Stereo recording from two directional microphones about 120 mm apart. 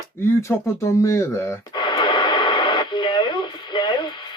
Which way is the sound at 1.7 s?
40° left (ahead or behind).